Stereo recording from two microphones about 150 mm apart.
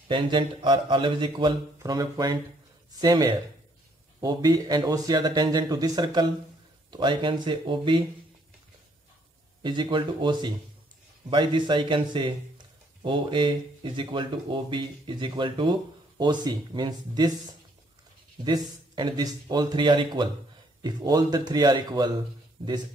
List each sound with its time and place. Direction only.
0.1 s a man's voice: 35° right (ahead or behind)
9.6 s a man's voice: 30° right (ahead or behind)
18.4 s a man's voice: 30° right (ahead or behind)